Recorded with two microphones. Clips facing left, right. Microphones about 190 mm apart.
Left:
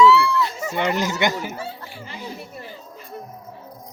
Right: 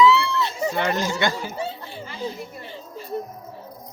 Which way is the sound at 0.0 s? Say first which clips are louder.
Left 2 dB; 20° right (ahead or behind).